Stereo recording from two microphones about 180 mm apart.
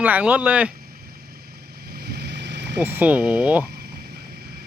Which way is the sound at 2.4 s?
75° right (ahead or behind).